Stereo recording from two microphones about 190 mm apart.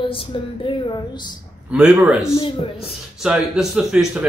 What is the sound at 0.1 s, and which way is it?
Speech, 30° left (ahead or behind).